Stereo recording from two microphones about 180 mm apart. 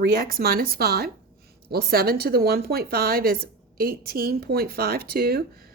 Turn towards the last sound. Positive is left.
turn(degrees=-60)  # may be behind; listen again after turning